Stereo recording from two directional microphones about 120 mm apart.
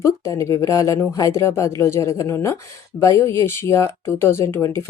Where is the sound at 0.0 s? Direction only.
25° left (ahead or behind).